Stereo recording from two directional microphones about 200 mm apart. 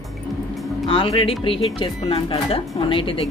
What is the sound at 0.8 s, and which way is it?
Speech, 25° left (ahead or behind).